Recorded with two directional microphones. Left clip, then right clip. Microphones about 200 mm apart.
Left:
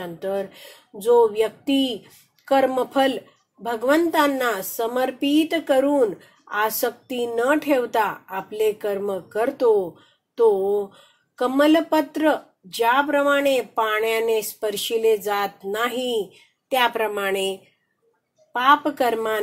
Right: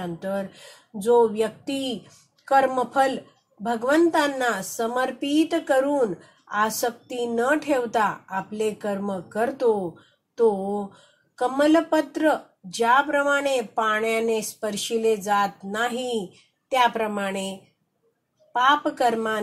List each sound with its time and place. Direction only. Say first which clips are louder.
0.0 s speech: left 2 dB; 35° left (ahead or behind)